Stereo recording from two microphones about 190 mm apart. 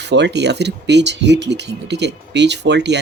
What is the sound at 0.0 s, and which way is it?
Speech, 65° right (ahead or behind).